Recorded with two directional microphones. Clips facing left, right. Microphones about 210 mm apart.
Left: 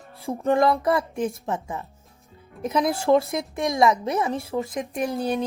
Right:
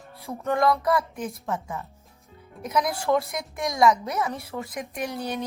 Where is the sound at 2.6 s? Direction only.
25° left (ahead or behind).